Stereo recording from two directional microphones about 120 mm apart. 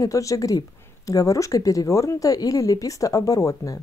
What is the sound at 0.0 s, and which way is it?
A woman's voice, 25° left (ahead or behind).